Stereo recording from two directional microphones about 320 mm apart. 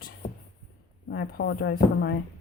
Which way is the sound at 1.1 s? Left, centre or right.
Left.